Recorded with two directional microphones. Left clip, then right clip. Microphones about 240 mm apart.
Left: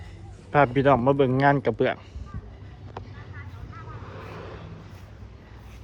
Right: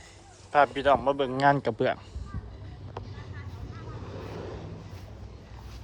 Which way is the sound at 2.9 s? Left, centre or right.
Right.